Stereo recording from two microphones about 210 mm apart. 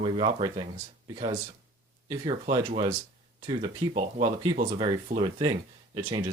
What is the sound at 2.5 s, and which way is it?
Speech, 25° right (ahead or behind).